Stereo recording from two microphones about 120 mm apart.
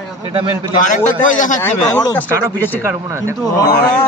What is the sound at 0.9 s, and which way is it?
Speech, 90° left.